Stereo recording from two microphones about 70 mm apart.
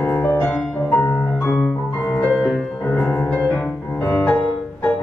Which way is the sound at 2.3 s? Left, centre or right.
Centre.